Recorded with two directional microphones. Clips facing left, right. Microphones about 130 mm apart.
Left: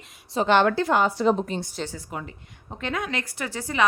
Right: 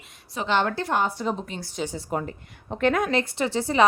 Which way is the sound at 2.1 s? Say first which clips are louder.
Right 6 dB; 40° right (ahead or behind).